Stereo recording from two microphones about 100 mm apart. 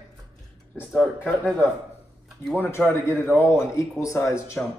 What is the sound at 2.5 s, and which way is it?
Speech, 20° left (ahead or behind).